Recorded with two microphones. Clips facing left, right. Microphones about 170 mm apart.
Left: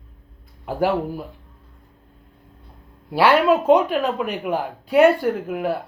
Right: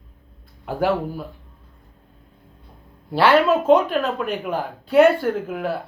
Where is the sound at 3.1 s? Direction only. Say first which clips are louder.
Even; 10° left (ahead or behind).